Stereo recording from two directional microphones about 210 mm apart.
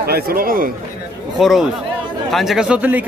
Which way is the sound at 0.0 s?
45° right (ahead or behind).